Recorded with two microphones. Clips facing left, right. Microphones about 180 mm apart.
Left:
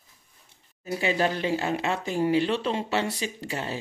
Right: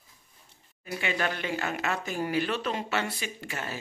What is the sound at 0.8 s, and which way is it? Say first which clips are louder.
Speech: left 5 dB; 30° left (ahead or behind).